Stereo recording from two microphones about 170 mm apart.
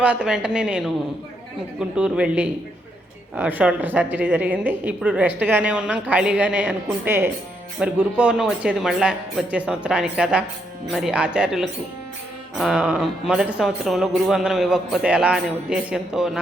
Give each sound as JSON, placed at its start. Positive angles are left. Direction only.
{"t": 0.0, "sound": "speech", "side_deg": -5}
{"t": 2.0, "sound": "a woman's voice", "side_deg": -5}